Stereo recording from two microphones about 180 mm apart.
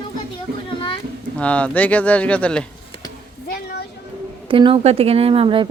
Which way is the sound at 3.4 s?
55° left (ahead or behind).